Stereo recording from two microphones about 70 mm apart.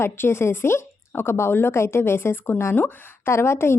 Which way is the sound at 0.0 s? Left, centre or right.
Left.